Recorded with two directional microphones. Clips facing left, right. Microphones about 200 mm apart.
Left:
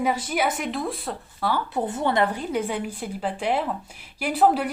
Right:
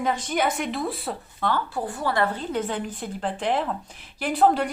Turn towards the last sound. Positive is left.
turn(degrees=5)  # may be behind; listen again after turning